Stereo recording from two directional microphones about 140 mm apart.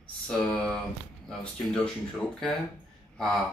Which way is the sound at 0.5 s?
5° left (ahead or behind).